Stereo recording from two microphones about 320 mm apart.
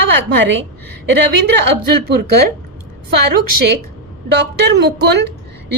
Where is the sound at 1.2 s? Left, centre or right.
Right.